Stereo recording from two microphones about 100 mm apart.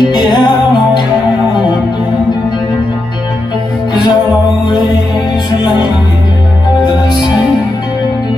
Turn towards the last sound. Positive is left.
turn(degrees=45)  # may be behind; listen again after turning